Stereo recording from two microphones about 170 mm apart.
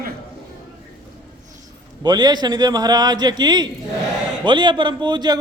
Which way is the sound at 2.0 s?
25° right (ahead or behind).